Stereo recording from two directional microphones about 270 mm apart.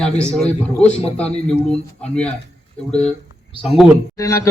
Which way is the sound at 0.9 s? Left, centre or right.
Left.